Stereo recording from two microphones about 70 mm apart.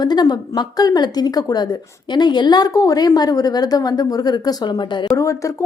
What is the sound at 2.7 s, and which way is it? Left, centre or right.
A woman's voice, left.